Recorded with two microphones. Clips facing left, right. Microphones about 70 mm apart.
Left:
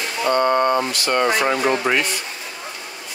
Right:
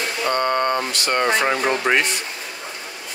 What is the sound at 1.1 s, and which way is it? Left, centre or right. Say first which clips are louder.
Speech: even; right.